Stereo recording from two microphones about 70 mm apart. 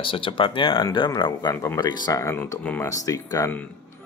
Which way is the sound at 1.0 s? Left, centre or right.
Left.